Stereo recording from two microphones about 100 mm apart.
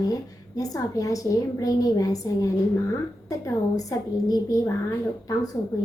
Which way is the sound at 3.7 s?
40° left (ahead or behind).